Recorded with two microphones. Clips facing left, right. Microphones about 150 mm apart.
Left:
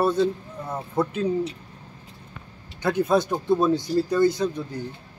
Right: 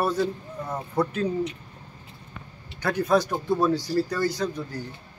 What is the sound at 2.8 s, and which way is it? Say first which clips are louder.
Speech: left 1 dB; 20° left (ahead or behind).